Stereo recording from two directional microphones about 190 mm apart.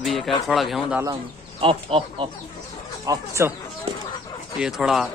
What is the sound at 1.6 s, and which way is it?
Speech, 30° right (ahead or behind).